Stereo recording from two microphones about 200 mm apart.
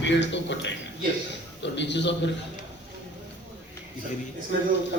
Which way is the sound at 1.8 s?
60° left (ahead or behind).